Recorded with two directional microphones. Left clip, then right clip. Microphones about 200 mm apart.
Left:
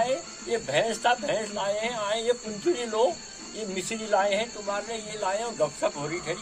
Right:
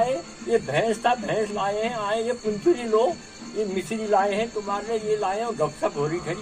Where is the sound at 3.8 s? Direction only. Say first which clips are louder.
Right 2 dB; 20° left (ahead or behind).